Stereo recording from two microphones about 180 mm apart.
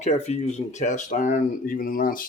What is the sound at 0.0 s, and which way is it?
Speech, 40° left (ahead or behind).